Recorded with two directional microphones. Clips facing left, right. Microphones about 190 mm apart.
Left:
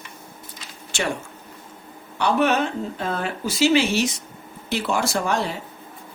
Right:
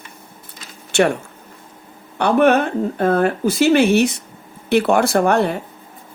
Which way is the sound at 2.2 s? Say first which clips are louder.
Right 6 dB; 55° right (ahead or behind).